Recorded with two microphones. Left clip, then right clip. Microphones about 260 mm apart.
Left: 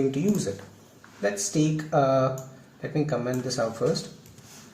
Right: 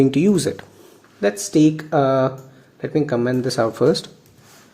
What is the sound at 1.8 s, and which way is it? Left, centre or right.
Speech, right.